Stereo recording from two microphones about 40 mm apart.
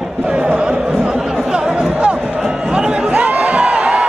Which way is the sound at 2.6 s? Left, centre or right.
Right.